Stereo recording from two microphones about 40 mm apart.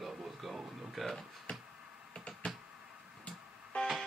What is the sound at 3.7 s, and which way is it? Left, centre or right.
Music, left.